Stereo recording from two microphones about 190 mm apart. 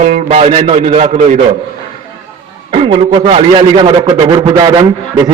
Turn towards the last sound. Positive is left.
turn(degrees=-20)  # may be behind; listen again after turning